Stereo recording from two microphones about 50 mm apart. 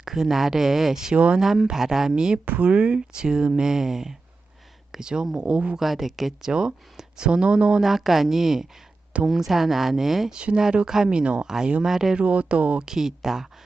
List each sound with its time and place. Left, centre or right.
0.0 s speech: centre
1.1 s speech: right
1.4 s speech: centre
5.7 s speech: centre
6.5 s speech: centre
7.8 s speech: centre
10.3 s speech: centre
12.1 s speech: right
12.8 s speech: centre